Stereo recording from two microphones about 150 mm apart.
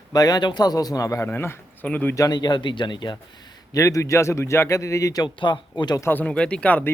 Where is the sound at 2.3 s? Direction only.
30° left (ahead or behind).